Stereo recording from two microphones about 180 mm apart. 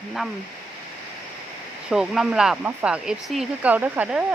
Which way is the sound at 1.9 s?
5° right (ahead or behind).